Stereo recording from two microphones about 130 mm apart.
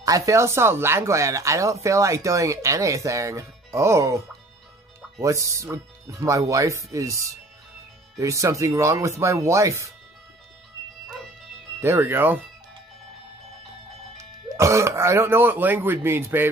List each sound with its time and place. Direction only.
0.0 s speech: 25° right (ahead or behind)
5.2 s speech: 25° right (ahead or behind)
11.8 s speech: 20° right (ahead or behind)
14.6 s speech: 25° right (ahead or behind)